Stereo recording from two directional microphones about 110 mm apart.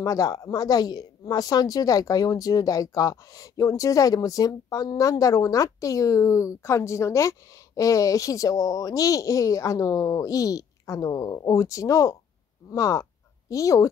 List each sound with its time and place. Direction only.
0.0 s speech: 35° left (ahead or behind)